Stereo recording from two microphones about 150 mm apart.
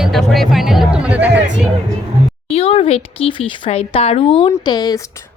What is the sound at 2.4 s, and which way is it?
Speech, 40° left (ahead or behind).